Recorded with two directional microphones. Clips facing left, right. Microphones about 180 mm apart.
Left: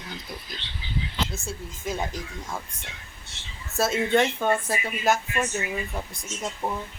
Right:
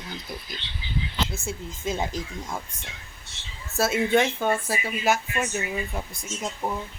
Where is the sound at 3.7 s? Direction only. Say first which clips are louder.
Right 1 dB; 5° right (ahead or behind).